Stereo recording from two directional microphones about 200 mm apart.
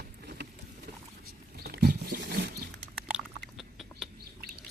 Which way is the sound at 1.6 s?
55° right (ahead or behind).